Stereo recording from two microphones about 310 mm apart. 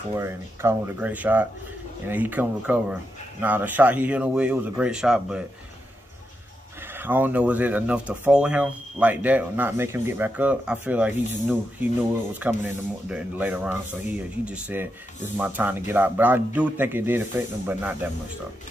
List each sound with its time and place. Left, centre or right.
0.1 s speech: centre
6.9 s speech: centre